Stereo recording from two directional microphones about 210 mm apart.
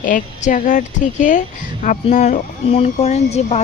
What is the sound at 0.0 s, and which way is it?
A woman's voice, 40° left (ahead or behind).